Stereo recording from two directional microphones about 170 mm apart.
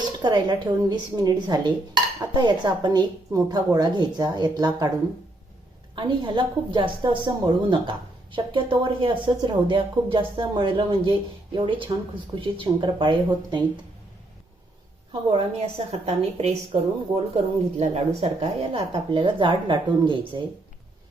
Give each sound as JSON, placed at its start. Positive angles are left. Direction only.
{"t": 0.2, "sound": "a woman's voice", "side_deg": -25}
{"t": 6.0, "sound": "a woman's voice", "side_deg": -25}
{"t": 15.3, "sound": "speech", "side_deg": -35}